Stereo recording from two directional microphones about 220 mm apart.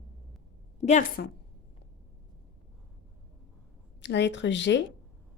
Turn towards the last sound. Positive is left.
turn(degrees=55)  # may be behind; listen again after turning